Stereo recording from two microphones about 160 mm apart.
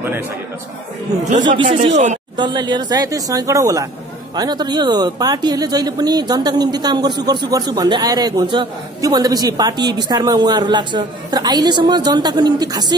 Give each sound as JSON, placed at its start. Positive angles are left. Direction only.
{"t": 1.9, "sound": "a woman's voice", "side_deg": -45}
{"t": 2.3, "sound": "speech", "side_deg": -30}